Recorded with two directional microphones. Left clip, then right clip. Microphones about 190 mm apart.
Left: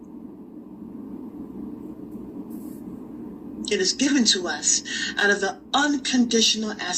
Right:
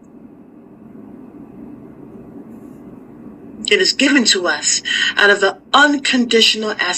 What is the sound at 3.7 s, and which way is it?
A woman's voice, 5° right (ahead or behind).